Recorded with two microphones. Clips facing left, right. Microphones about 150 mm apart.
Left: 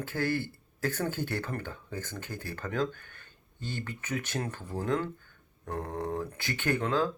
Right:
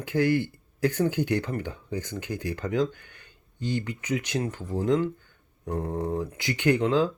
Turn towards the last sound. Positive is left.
turn(degrees=-15)  # may be behind; listen again after turning